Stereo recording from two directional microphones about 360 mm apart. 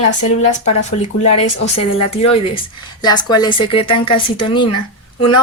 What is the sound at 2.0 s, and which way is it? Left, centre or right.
Speech, centre.